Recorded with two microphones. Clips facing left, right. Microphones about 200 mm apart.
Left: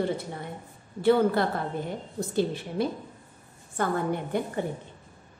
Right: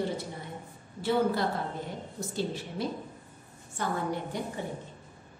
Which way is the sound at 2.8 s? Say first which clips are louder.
Left 6 dB; 60° left (ahead or behind).